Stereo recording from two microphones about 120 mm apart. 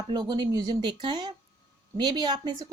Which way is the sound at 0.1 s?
35° right (ahead or behind).